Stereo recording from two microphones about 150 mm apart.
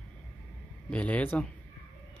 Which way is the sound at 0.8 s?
10° left (ahead or behind).